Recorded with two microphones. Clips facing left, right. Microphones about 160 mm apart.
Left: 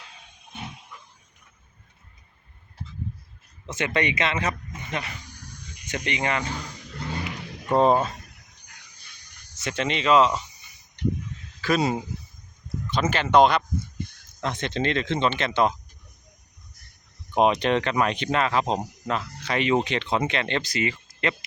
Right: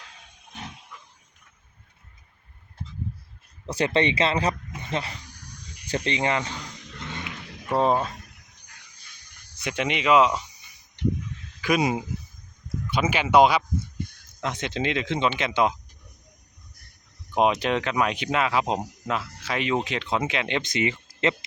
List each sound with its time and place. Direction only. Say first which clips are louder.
3.7 s speech: right 3 dB; 35° right (ahead or behind)
7.0 s a sound: left 5 dB; 35° left (ahead or behind)
7.7 s speech: left 3 dB; centre (ahead or behind)
9.6 s speech: even; 15° right (ahead or behind)
11.6 s speech: even; 15° right (ahead or behind)
17.3 s speech: left 2 dB; 5° right (ahead or behind)
20.6 s speech: right 1 dB; 20° right (ahead or behind)